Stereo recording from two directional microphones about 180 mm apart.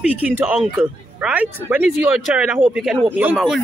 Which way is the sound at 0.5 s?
Centre (ahead or behind).